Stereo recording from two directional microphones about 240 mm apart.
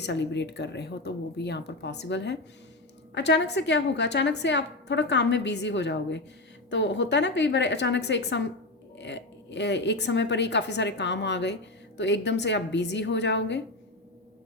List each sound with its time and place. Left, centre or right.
0.0 s a woman's voice: left